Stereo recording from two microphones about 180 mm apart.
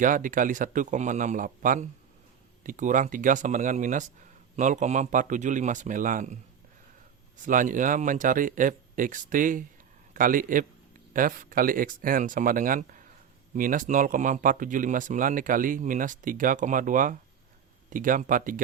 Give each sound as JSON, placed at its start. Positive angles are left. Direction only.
{"t": 0.0, "sound": "speech", "side_deg": -50}
{"t": 7.4, "sound": "speech", "side_deg": -45}